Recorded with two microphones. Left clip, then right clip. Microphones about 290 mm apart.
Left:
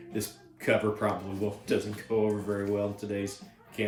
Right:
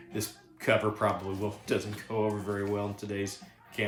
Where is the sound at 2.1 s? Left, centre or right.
Centre.